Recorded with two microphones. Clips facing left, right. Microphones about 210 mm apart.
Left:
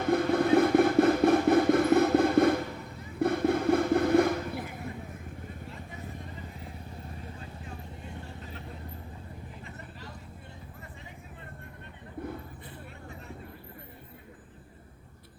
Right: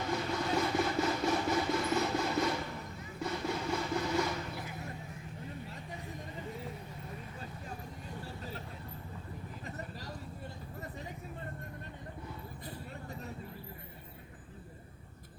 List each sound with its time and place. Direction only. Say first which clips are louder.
0.0 s vehicle: left 10 dB; 55° left (ahead or behind)
3.2 s a sound: left 10 dB; 55° left (ahead or behind)
9.6 s vehicle: right 2 dB; 40° right (ahead or behind)